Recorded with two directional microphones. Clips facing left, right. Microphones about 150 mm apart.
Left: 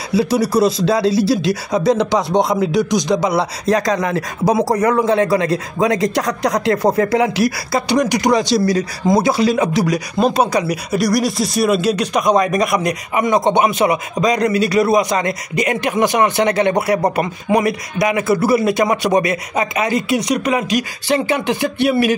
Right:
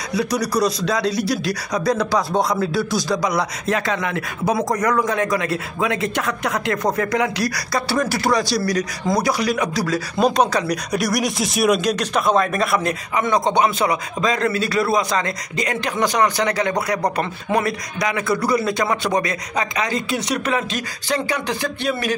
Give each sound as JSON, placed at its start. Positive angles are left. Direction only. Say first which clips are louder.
{"t": 0.1, "sound": "speech", "louder": "left 6 dB", "side_deg": 30}
{"t": 10.1, "sound": "speech", "louder": "left 1 dB", "side_deg": 5}
{"t": 17.2, "sound": "speech", "louder": "left 4 dB", "side_deg": 10}
{"t": 17.9, "sound": "speech", "louder": "left 6 dB", "side_deg": 25}